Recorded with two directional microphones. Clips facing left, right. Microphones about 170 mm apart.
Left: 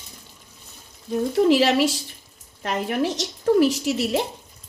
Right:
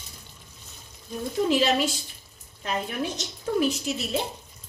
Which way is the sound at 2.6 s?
70° left (ahead or behind).